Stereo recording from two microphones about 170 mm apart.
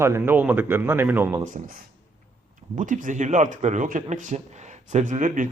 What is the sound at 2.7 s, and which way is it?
Speech, 50° right (ahead or behind).